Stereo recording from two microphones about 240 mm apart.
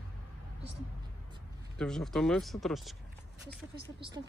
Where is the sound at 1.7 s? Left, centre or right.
Centre.